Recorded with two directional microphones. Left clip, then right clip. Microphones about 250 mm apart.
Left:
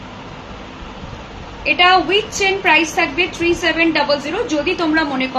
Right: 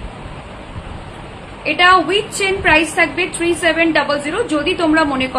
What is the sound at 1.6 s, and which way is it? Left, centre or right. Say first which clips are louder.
A woman's voice: right 1 dB; centre.